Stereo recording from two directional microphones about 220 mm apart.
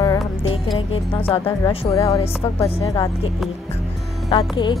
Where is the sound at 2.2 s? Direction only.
25° left (ahead or behind).